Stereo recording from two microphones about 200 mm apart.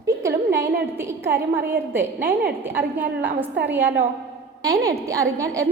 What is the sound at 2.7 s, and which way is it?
A woman's voice, 10° right (ahead or behind).